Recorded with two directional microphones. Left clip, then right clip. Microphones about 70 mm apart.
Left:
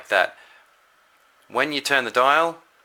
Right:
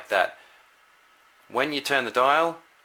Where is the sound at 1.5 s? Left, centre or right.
Left.